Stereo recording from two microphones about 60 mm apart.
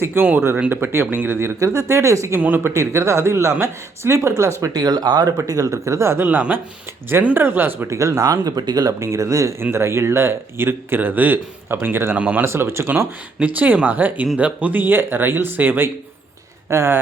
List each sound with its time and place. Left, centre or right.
0.0 s speech: right
1.5 s speech: right
4.6 s speech: right
5.7 s speech: right
7.3 s speech: right
7.9 s speech: right
9.0 s speech: right
9.7 s speech: right
12.1 s speech: right
12.5 s speech: right
13.4 s speech: right
16.6 s speech: right